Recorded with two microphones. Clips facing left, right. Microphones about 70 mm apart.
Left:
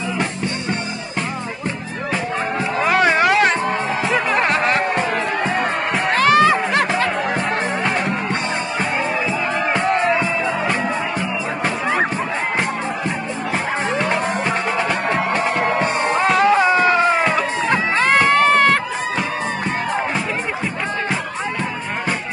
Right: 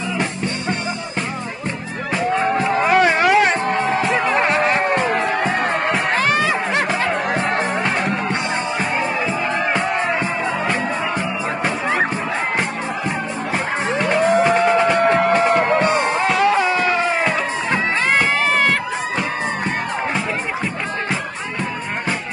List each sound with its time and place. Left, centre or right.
2.8 s music: centre
4.1 s music: right
6.3 s music: centre
9.7 s music: centre
13.5 s music: centre
17.1 s crowd: centre